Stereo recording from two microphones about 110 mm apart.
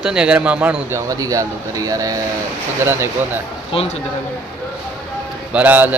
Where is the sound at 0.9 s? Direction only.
30° right (ahead or behind).